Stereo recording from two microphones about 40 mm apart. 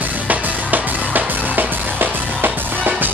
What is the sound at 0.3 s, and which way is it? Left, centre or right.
Music, right.